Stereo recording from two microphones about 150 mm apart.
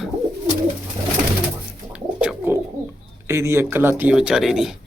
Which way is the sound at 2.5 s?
15° right (ahead or behind).